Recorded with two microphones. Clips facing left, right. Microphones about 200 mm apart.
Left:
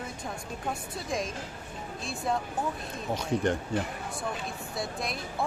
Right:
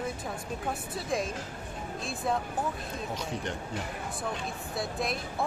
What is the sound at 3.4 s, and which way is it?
Speech, 50° left (ahead or behind).